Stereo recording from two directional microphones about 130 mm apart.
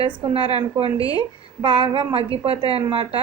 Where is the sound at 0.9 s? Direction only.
30° left (ahead or behind).